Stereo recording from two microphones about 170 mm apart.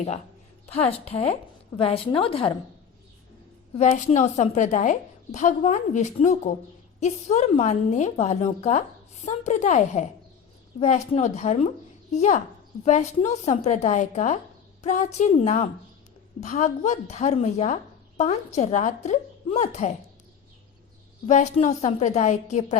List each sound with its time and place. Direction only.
0.7 s a woman's voice: 35° left (ahead or behind)
3.8 s a woman's voice: 45° left (ahead or behind)
21.2 s a woman's voice: 45° left (ahead or behind)